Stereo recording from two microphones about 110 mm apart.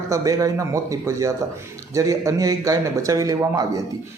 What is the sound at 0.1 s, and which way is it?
A man's voice, 30° right (ahead or behind).